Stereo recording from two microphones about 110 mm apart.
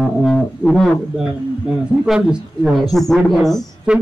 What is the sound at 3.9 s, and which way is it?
Speech, 10° right (ahead or behind).